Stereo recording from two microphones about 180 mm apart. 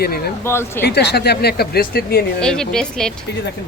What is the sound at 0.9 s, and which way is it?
Speech, 65° left (ahead or behind).